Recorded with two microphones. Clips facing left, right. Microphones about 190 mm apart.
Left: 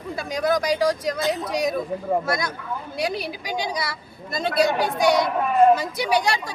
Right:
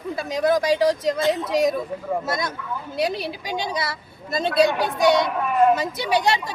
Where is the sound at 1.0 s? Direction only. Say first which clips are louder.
Right 3 dB; 25° right (ahead or behind).